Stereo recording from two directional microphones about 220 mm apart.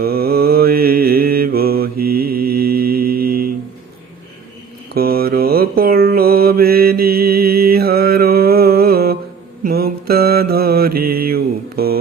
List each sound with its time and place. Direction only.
0.0 s mantra: 45° right (ahead or behind)
4.9 s mantra: 45° right (ahead or behind)